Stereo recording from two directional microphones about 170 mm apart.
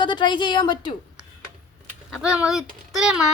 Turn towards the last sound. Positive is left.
turn(degrees=-5)  # may be behind; listen again after turning